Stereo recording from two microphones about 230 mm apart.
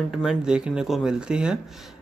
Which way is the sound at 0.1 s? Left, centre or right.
Centre.